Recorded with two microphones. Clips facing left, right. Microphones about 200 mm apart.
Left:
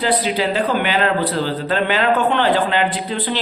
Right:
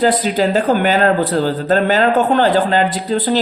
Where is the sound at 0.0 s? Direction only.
45° right (ahead or behind).